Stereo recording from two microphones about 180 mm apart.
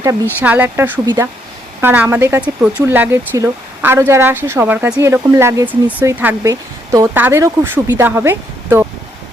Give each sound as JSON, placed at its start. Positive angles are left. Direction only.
{"t": 0.3, "sound": "a woman's voice", "side_deg": -10}
{"t": 1.0, "sound": "speech", "side_deg": -20}
{"t": 1.8, "sound": "a woman's voice", "side_deg": -10}